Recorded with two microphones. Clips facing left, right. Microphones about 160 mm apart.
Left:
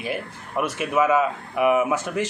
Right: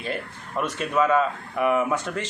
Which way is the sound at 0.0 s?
10° left (ahead or behind).